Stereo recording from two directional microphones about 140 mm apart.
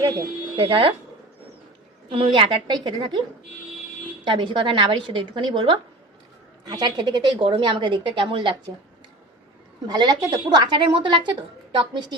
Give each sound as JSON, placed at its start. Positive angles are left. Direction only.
{"t": 0.5, "sound": "a woman's voice", "side_deg": -40}
{"t": 2.0, "sound": "a woman's voice", "side_deg": -35}
{"t": 4.2, "sound": "a woman's voice", "side_deg": -35}
{"t": 9.8, "sound": "a woman's voice", "side_deg": -30}